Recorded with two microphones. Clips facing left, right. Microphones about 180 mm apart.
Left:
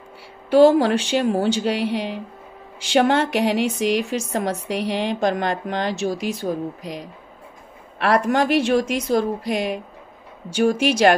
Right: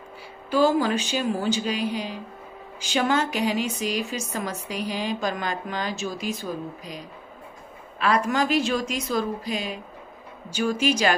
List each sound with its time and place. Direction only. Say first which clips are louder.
0.5 s a woman's voice: left 7 dB; 70° left (ahead or behind)